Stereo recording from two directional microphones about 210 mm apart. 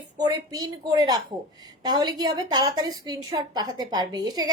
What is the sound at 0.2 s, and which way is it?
A woman's voice, 20° right (ahead or behind).